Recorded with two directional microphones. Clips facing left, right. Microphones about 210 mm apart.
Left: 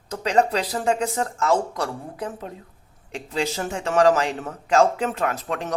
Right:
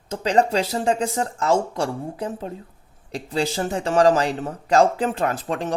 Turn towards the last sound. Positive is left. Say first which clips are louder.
# right 2 dB
turn(degrees=-30)  # may be behind; listen again after turning